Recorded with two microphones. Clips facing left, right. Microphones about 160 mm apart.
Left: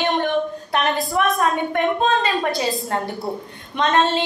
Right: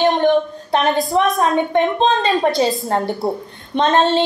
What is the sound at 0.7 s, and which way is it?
A woman's voice, 25° right (ahead or behind).